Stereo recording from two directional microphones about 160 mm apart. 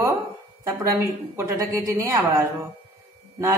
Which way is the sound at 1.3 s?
15° right (ahead or behind).